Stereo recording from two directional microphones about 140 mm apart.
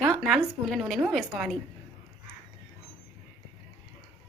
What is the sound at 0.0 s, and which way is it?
A woman's voice, 5° left (ahead or behind).